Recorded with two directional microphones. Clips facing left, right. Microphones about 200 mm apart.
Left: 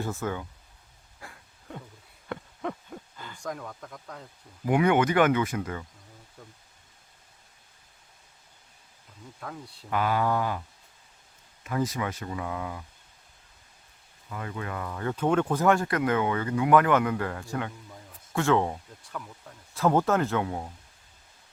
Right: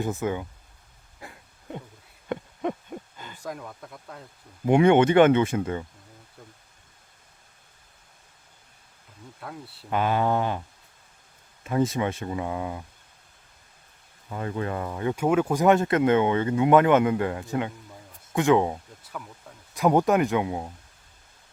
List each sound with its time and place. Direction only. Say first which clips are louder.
0.0 s speech: right 4 dB; 15° right (ahead or behind)
1.2 s a sound: right 3 dB; 20° right (ahead or behind)
2.3 s owl: right 5 dB; 20° right (ahead or behind)
3.3 s speech: even; 5° right (ahead or behind)
4.6 s speech: right 5 dB; 25° right (ahead or behind)
9.4 s speech: right 1 dB; 5° right (ahead or behind)
9.9 s speech: right 2 dB; 25° right (ahead or behind)
11.6 s speech: right 5 dB; 25° right (ahead or behind)
14.3 s speech: right 6 dB; 30° right (ahead or behind); by 15.6 s 10° right (ahead or behind)
15.6 s speech: right 4 dB; 20° right (ahead or behind); by 19.5 s 5° right (ahead or behind)
19.7 s speech: right 3 dB; 15° right (ahead or behind)